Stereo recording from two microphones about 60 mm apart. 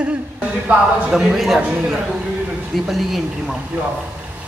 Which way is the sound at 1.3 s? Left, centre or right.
Centre.